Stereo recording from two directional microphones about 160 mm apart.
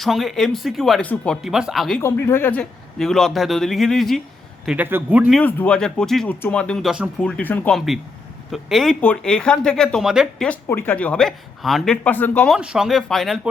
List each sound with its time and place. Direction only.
0.0 s a man's voice: centre (ahead or behind)
2.0 s a man's voice: 15° left (ahead or behind); by 5.4 s 10° right (ahead or behind)
5.4 s a man's voice: 10° left (ahead or behind)
7.2 s a man's voice: 5° left (ahead or behind)
12.0 s a man's voice: 10° left (ahead or behind)
12.5 s a man's voice: 5° right (ahead or behind)